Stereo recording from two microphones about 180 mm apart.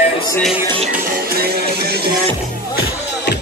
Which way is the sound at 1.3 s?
60° right (ahead or behind).